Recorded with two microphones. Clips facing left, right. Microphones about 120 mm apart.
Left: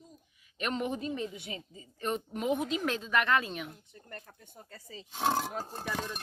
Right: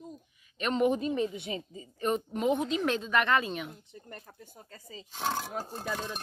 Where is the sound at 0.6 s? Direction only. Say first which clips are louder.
Right 5 dB; 5° left (ahead or behind).